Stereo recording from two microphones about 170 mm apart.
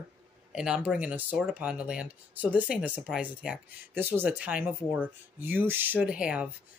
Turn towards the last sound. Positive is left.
turn(degrees=-5)  # may be behind; listen again after turning